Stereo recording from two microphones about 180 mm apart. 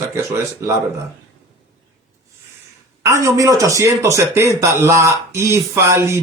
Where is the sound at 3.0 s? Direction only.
20° right (ahead or behind).